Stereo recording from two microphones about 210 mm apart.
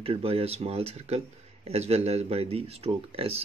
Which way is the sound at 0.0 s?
25° right (ahead or behind).